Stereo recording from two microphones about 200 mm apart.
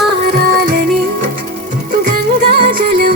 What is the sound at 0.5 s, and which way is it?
Music, 50° right (ahead or behind).